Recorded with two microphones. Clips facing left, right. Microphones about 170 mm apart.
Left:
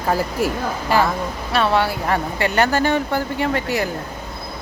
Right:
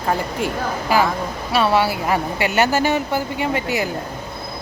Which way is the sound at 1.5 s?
5° right (ahead or behind).